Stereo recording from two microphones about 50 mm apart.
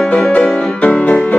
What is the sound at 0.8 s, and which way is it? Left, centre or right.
Music, left.